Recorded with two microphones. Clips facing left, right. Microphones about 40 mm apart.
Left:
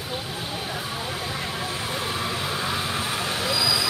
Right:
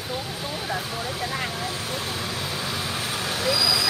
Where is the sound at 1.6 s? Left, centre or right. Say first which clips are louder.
Left 1 dB; left.